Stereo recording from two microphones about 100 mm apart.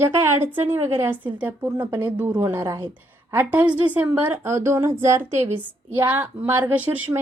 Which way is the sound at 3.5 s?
15° right (ahead or behind).